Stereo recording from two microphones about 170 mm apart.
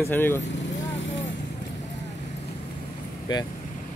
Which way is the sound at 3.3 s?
25° left (ahead or behind).